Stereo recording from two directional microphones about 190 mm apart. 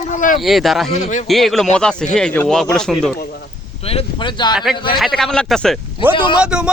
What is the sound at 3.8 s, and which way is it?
Speech, 30° left (ahead or behind).